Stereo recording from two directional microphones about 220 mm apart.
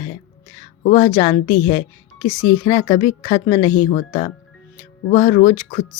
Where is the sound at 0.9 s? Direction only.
15° left (ahead or behind).